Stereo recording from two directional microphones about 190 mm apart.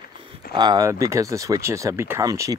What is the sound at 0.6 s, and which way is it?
Speech, 20° right (ahead or behind).